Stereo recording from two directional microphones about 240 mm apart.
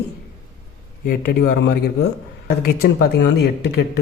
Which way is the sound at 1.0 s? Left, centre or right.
Left.